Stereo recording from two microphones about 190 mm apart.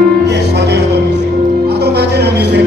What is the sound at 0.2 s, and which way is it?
Music, 60° right (ahead or behind).